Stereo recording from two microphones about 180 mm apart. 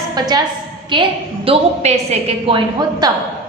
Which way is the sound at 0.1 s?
20° right (ahead or behind).